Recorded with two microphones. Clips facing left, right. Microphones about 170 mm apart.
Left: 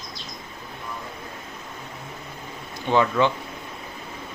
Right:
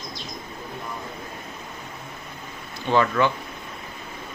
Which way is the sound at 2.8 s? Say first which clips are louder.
Even; 15° left (ahead or behind).